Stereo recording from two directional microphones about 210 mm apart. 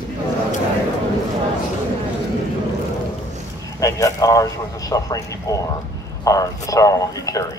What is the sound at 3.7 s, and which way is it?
A man's voice, 15° left (ahead or behind).